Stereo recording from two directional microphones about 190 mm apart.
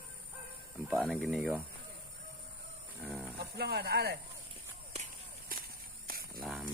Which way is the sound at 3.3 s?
60° right (ahead or behind).